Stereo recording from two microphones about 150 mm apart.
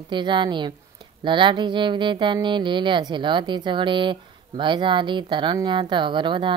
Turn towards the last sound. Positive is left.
turn(degrees=-35)  # may be behind; listen again after turning